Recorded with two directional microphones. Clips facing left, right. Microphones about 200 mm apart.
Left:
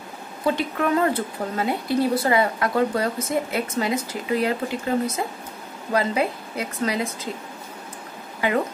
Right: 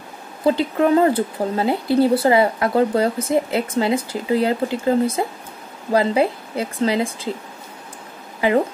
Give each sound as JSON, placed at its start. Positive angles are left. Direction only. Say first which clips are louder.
{"t": 0.5, "sound": "speech", "louder": "right 6 dB", "side_deg": -30}